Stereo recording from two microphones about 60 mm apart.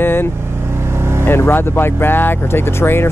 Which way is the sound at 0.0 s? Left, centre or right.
Left.